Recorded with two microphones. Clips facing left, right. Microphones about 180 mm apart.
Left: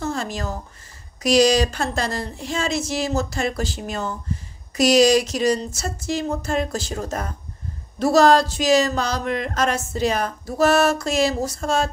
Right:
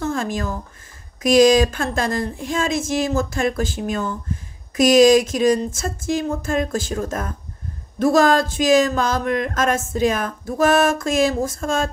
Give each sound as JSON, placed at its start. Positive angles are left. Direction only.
{"t": 0.0, "sound": "a woman's voice", "side_deg": -50}